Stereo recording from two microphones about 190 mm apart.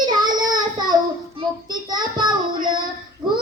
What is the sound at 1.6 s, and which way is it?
Child singing, 20° right (ahead or behind).